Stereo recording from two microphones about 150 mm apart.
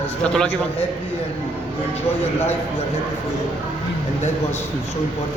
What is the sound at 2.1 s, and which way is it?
Speech, 15° left (ahead or behind).